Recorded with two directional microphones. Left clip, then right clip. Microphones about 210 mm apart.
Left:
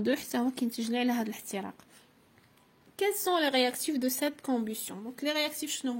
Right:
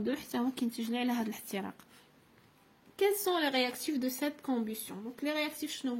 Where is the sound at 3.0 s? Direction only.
20° left (ahead or behind).